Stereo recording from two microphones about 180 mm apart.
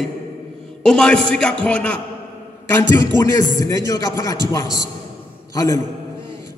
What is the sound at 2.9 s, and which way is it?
Speech, 15° left (ahead or behind).